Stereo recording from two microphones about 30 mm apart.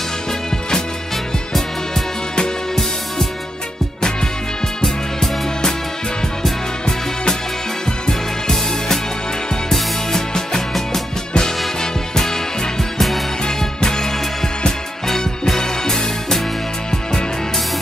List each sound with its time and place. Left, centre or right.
8.1 s music: centre
13.6 s music: centre